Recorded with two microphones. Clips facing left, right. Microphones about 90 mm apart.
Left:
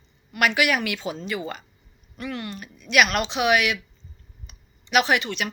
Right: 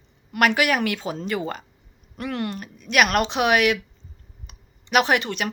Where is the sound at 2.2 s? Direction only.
55° right (ahead or behind).